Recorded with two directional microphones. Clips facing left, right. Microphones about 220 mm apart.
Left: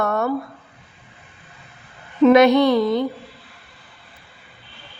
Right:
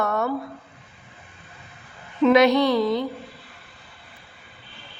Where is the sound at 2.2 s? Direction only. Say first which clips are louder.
Left 4 dB; 50° left (ahead or behind).